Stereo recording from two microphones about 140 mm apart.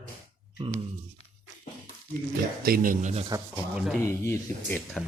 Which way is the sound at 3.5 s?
5° right (ahead or behind).